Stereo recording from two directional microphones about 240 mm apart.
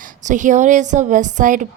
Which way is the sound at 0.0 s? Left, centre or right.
Right.